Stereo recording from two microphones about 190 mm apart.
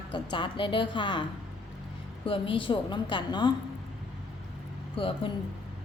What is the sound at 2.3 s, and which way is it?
A woman's voice, 25° left (ahead or behind).